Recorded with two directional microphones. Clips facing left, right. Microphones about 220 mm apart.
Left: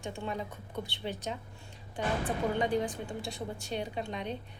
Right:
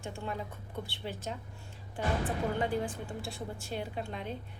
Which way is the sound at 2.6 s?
5° right (ahead or behind).